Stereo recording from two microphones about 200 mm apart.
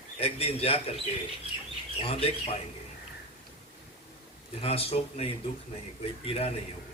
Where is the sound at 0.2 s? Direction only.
30° left (ahead or behind).